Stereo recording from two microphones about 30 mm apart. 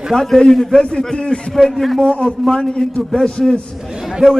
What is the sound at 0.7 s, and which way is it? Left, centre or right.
Speech, left.